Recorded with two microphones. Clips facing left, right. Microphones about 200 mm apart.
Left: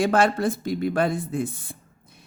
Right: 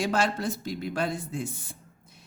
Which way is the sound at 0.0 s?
55° left (ahead or behind).